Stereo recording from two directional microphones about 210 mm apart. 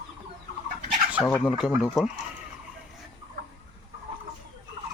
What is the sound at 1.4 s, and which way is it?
Speech, 5° right (ahead or behind).